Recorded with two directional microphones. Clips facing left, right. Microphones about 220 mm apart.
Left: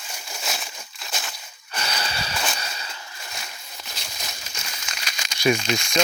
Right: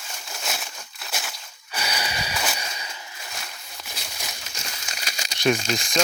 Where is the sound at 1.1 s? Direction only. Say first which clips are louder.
Even; 5° right (ahead or behind).